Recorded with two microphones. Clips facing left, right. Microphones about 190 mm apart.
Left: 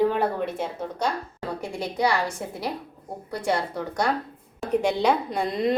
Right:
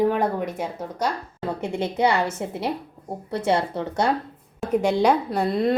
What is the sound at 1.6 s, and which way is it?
A woman's voice, 25° right (ahead or behind).